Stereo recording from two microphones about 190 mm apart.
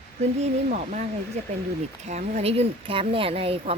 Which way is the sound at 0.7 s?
40° right (ahead or behind).